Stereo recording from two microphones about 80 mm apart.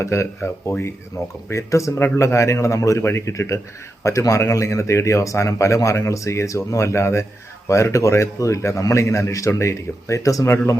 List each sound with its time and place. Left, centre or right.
0.0 s speech: left